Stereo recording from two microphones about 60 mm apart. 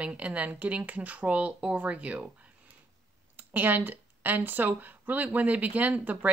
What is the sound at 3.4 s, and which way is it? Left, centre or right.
A woman's voice, right.